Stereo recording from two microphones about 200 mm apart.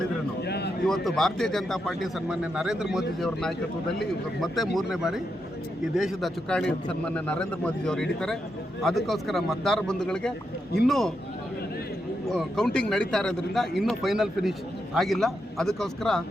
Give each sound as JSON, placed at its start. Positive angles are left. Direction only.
{"t": 0.4, "sound": "a sound", "side_deg": 55}
{"t": 0.9, "sound": "a man's voice", "side_deg": 0}
{"t": 12.3, "sound": "a man's voice", "side_deg": 0}